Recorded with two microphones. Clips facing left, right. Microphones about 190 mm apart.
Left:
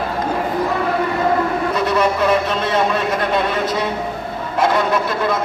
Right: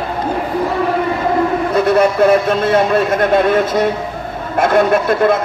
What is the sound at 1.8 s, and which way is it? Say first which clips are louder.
A man's voice: right 7 dB; 50° right (ahead or behind).